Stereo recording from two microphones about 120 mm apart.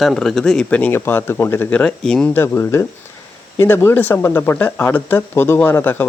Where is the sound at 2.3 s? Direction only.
20° left (ahead or behind).